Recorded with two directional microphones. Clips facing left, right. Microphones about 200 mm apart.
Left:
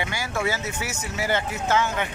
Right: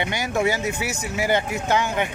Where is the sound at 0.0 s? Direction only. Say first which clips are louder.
Right 4 dB; 20° right (ahead or behind).